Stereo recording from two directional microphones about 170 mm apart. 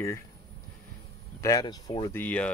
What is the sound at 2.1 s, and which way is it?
Speech, 10° left (ahead or behind).